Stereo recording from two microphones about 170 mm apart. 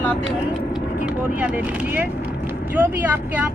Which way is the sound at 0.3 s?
5° right (ahead or behind).